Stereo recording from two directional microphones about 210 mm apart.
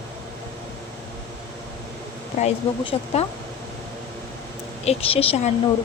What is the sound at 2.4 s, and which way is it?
Speech, 30° left (ahead or behind).